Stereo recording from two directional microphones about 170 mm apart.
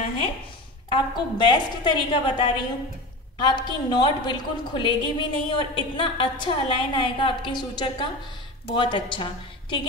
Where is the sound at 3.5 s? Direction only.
25° left (ahead or behind).